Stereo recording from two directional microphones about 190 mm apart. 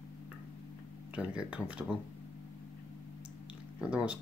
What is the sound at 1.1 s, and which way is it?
Speech, 5° right (ahead or behind).